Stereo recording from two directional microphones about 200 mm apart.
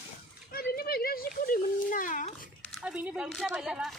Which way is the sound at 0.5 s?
50° left (ahead or behind).